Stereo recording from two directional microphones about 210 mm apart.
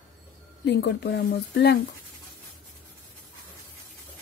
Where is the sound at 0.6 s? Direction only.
55° left (ahead or behind).